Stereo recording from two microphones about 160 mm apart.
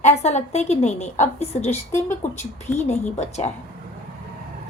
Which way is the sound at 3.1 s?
45° left (ahead or behind).